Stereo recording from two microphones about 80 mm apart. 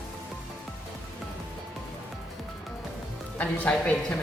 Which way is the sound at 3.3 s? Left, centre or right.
Left.